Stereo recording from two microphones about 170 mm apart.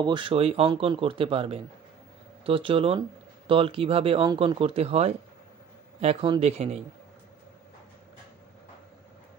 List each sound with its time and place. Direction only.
0.0 s a man's voice: 30° right (ahead or behind)